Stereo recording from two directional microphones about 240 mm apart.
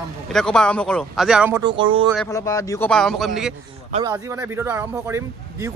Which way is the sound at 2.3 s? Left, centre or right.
Centre.